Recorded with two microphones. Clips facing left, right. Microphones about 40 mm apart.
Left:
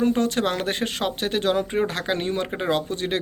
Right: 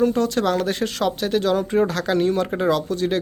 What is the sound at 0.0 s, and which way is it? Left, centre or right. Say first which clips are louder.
A man's voice: right 2 dB; left.